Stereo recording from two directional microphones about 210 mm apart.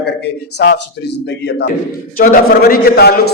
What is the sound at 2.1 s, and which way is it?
A man's voice, 40° left (ahead or behind).